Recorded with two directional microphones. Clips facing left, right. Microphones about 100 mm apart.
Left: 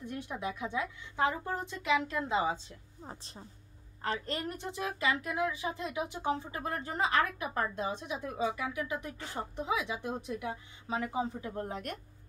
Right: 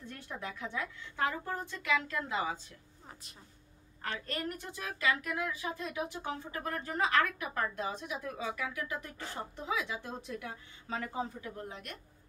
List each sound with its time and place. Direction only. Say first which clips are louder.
0.0 s a woman's voice: left 5 dB; 15° left (ahead or behind)
11.4 s a woman's voice: left 6 dB; 40° left (ahead or behind)